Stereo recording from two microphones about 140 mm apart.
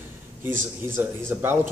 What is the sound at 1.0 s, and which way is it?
Speech, 15° right (ahead or behind).